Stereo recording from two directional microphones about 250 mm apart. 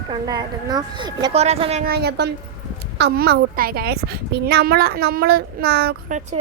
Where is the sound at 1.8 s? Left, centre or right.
Right.